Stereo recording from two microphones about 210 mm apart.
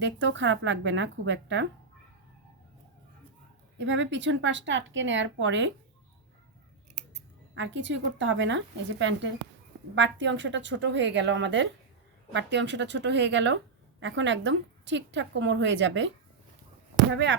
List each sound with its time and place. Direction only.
0.0 s a woman's voice: 60° right (ahead or behind)
3.8 s a woman's voice: 60° right (ahead or behind)
7.5 s a woman's voice: 60° right (ahead or behind)